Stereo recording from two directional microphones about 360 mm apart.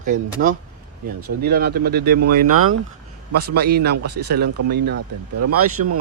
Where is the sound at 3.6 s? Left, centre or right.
Right.